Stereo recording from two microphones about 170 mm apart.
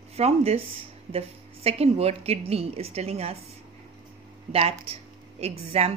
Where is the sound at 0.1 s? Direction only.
35° right (ahead or behind).